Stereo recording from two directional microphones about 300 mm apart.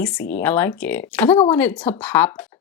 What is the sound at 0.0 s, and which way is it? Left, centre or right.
Speech, centre.